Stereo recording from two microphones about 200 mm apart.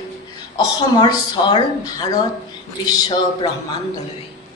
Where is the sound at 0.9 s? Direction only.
20° left (ahead or behind).